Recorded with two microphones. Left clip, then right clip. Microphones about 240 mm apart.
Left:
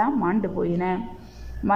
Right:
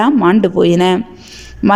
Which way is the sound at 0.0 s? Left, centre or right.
Right.